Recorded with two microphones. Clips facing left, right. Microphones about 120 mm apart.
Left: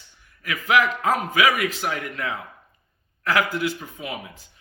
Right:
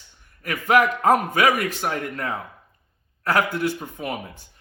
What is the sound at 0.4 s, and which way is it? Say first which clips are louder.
Speech: right 2 dB; 50° right (ahead or behind).